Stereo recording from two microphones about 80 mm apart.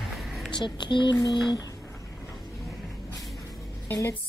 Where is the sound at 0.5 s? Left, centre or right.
Left.